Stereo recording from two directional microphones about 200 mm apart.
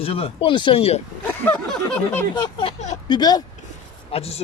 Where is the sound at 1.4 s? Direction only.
10° left (ahead or behind).